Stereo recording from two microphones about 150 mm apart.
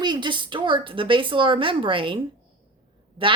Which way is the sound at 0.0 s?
30° right (ahead or behind).